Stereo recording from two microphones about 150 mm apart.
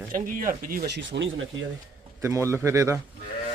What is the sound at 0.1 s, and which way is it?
Speech, 70° right (ahead or behind).